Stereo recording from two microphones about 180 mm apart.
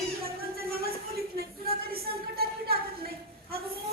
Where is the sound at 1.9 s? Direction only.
60° right (ahead or behind).